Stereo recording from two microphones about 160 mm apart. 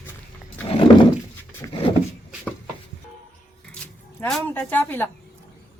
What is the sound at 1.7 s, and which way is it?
Vehicle, 35° left (ahead or behind).